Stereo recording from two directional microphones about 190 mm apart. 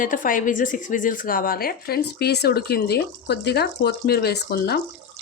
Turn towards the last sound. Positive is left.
turn(degrees=55)  # may be behind; listen again after turning